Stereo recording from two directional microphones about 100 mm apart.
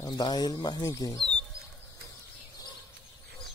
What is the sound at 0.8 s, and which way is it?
Speech, 35° left (ahead or behind).